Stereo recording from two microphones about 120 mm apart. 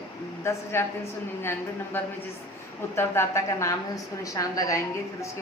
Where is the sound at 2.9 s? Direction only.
20° left (ahead or behind).